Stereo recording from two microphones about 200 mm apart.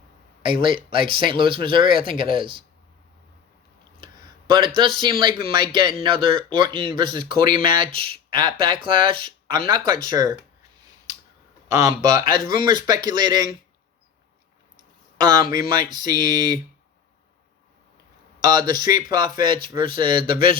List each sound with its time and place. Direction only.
0.4 s speech: 25° right (ahead or behind)
4.0 s a sound: 25° right (ahead or behind)
4.8 s speech: 20° right (ahead or behind)
15.2 s speech: 20° right (ahead or behind)
18.4 s speech: 20° right (ahead or behind)